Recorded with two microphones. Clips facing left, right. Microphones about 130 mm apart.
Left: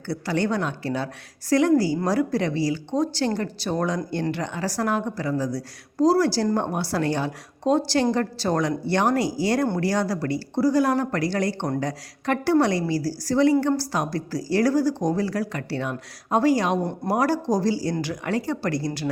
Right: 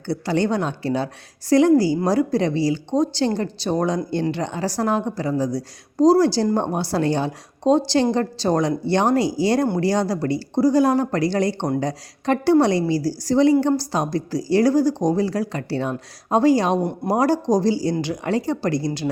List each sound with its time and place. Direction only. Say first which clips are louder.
0.1 s speech: right 3 dB; 25° right (ahead or behind)